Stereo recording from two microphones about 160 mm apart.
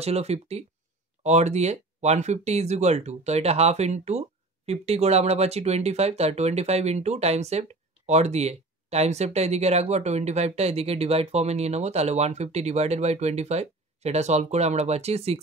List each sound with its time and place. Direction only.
0.0 s speech: 40° right (ahead or behind)